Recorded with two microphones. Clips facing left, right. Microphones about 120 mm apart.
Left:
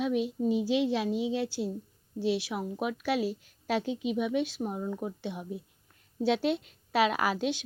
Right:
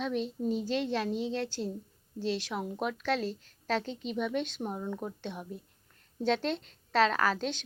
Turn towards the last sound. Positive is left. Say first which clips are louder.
# left 1 dB
turn(degrees=10)  # may be behind; listen again after turning